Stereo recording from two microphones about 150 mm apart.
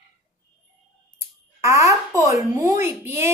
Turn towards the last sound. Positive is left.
turn(degrees=-15)  # may be behind; listen again after turning